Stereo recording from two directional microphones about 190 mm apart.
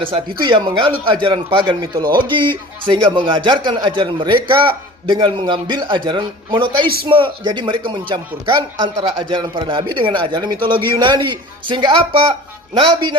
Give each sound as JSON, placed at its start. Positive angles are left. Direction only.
{"t": 0.0, "sound": "speech", "side_deg": -25}